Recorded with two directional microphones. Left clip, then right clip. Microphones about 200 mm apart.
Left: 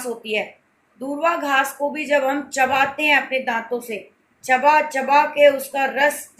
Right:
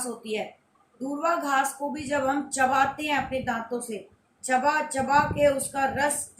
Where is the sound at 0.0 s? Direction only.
30° right (ahead or behind).